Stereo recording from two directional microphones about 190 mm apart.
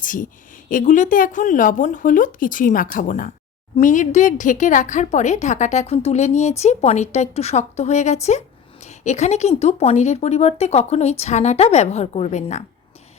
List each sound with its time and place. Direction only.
0.0 s a woman's voice: 45° left (ahead or behind)